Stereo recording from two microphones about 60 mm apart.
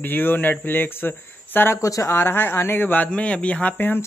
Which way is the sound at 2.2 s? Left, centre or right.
Left.